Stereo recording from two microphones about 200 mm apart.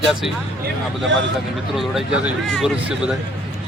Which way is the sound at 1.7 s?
Centre (ahead or behind).